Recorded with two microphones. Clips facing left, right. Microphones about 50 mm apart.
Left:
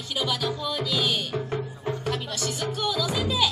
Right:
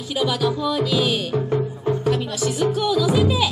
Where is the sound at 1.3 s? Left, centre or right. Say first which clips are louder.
Right 8 dB; centre.